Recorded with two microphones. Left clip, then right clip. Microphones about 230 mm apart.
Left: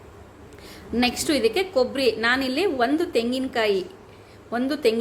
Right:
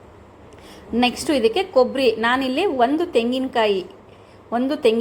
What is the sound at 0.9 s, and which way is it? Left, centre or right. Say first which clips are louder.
A woman's voice: right 3 dB; centre.